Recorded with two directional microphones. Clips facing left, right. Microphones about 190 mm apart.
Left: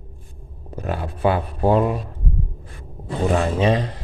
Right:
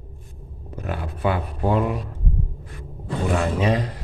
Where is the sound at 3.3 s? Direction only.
30° left (ahead or behind).